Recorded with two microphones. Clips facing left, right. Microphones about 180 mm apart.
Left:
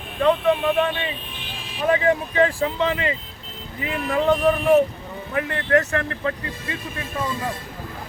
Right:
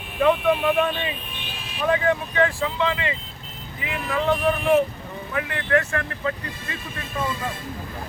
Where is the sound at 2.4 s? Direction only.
35° left (ahead or behind).